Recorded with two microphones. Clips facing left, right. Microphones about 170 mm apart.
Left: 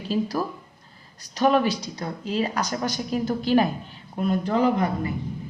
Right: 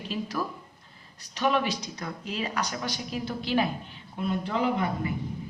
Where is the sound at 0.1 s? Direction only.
40° left (ahead or behind).